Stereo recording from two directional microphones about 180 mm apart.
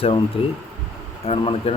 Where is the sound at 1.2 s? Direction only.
35° left (ahead or behind).